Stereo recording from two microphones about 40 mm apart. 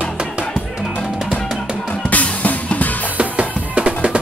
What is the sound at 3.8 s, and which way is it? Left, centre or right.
Music, right.